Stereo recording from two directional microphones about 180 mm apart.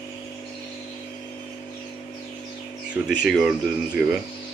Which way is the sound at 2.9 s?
5° right (ahead or behind).